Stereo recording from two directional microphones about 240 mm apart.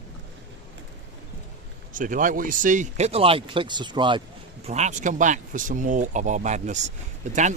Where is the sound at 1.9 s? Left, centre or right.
Right.